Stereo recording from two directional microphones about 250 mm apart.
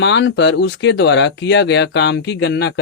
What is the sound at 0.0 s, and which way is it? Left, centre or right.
Speech, left.